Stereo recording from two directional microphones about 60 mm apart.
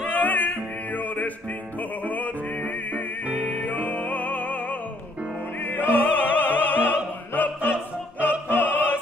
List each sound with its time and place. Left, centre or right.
0.1 s music: left
5.6 s opera: left